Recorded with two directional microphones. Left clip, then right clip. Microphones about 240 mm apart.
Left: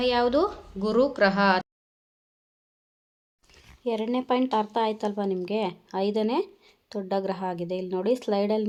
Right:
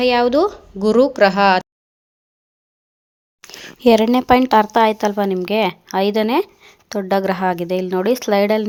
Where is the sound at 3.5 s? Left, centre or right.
Right.